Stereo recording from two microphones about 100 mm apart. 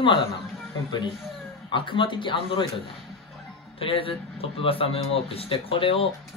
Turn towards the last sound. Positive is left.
turn(degrees=65)  # may be behind; listen again after turning